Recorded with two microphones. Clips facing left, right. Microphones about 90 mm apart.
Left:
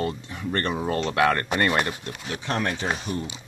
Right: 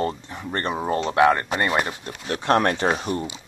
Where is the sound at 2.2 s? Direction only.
55° right (ahead or behind).